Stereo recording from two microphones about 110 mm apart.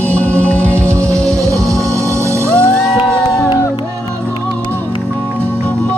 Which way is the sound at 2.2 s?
25° right (ahead or behind).